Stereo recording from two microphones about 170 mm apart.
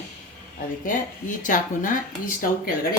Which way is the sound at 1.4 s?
50° left (ahead or behind).